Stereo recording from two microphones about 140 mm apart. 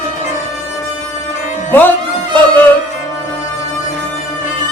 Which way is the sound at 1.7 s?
15° left (ahead or behind).